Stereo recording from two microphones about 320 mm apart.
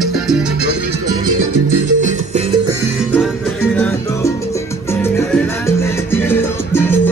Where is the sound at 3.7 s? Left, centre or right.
Centre.